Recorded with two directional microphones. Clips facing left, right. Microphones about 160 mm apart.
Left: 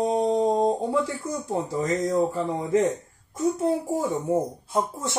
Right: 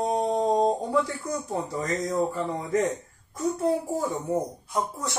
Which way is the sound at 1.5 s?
25° left (ahead or behind).